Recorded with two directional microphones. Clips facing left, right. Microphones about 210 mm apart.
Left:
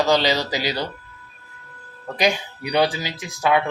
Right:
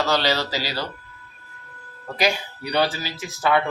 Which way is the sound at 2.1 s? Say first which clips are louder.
Left 2 dB; 15° left (ahead or behind).